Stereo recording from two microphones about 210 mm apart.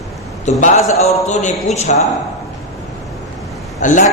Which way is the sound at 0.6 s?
35° left (ahead or behind).